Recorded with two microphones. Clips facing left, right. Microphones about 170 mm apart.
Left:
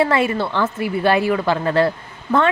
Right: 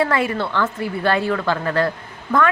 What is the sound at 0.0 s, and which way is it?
A woman's voice, 25° left (ahead or behind).